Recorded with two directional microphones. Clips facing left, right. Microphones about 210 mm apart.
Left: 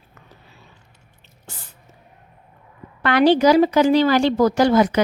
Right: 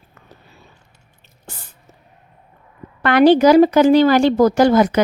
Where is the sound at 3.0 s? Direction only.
50° right (ahead or behind).